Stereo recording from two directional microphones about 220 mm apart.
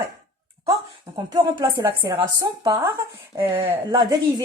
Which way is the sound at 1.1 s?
20° right (ahead or behind).